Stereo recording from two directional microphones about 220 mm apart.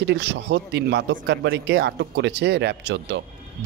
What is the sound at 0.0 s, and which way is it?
Speech, 55° right (ahead or behind).